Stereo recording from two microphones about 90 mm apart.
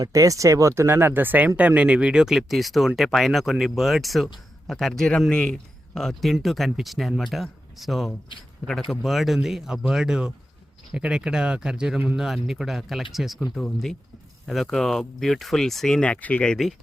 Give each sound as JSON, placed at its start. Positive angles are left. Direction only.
{"t": 0.0, "sound": "speech", "side_deg": -40}
{"t": 0.8, "sound": "speech", "side_deg": -25}